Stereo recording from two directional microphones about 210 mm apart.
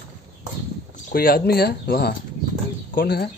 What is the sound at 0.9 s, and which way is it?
Speech, 45° left (ahead or behind).